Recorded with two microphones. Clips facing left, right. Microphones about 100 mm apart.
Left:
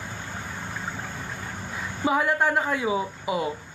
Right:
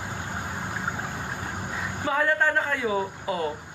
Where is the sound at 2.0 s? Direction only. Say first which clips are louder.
Left 1 dB; 15° left (ahead or behind).